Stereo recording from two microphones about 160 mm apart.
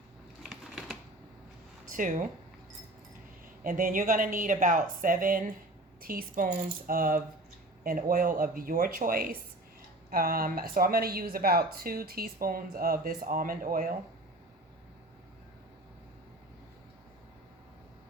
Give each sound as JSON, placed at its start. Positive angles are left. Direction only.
{"t": 0.4, "sound": "typewriter", "side_deg": 0}
{"t": 1.9, "sound": "speech", "side_deg": -55}
{"t": 3.6, "sound": "speech", "side_deg": -60}